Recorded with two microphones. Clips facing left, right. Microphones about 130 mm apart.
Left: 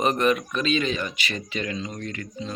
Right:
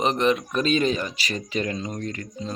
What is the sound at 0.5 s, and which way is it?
Speech, 40° right (ahead or behind).